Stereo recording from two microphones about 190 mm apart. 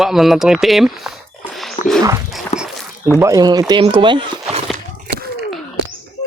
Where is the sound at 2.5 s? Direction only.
35° left (ahead or behind).